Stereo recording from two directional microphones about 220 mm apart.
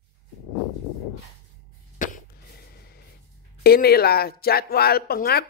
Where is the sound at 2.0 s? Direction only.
40° left (ahead or behind).